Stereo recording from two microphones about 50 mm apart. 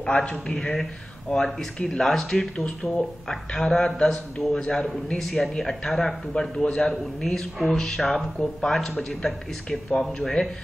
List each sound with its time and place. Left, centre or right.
0.0 s a man's voice: left
0.5 s speech: centre